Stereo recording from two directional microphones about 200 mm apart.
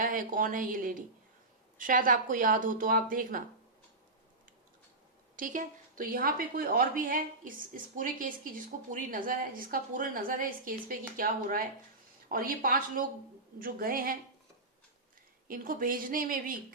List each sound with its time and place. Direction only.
0.0 s a woman's voice: 45° right (ahead or behind)
5.4 s a woman's voice: 40° right (ahead or behind)
15.4 s a woman's voice: 45° right (ahead or behind)